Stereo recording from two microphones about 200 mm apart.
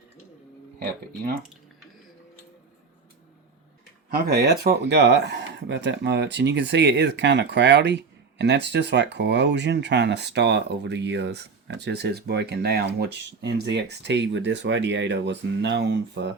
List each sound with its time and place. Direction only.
0.8 s speech: 50° right (ahead or behind)
4.1 s speech: 50° right (ahead or behind)